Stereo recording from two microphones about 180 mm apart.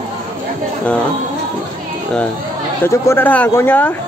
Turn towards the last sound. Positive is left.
turn(degrees=10)  # may be behind; listen again after turning